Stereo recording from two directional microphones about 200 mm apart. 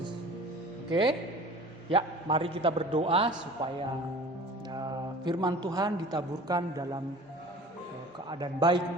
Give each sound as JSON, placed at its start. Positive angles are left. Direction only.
{"t": 0.9, "sound": "a man's voice", "side_deg": -25}
{"t": 4.7, "sound": "a woman's voice", "side_deg": -20}
{"t": 8.3, "sound": "a man's voice", "side_deg": -20}